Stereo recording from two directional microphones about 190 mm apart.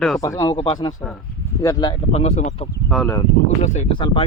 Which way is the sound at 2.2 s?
35° left (ahead or behind).